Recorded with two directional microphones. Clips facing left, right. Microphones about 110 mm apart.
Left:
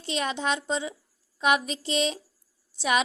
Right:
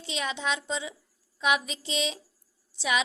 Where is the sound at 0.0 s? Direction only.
50° left (ahead or behind).